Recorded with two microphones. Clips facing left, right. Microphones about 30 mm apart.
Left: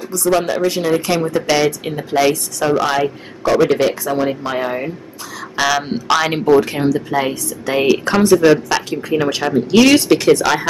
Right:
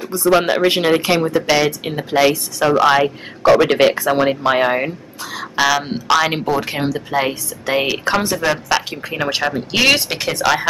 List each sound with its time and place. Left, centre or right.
0.1 s speech: right
1.2 s a woman's voice: centre
3.5 s speech: right
5.6 s speech: centre
6.6 s a woman's voice: centre